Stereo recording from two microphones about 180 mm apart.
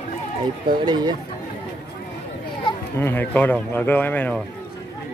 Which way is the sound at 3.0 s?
10° left (ahead or behind).